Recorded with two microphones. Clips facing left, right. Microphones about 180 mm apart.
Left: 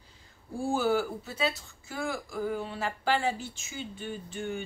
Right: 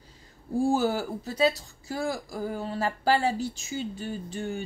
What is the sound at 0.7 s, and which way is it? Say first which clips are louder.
Speech: even; 40° right (ahead or behind).